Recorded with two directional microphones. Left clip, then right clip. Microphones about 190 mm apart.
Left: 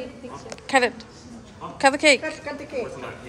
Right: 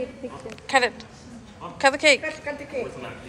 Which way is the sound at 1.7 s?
20° left (ahead or behind).